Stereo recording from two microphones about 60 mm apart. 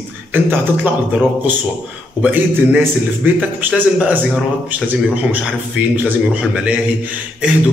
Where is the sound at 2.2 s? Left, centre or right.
Right.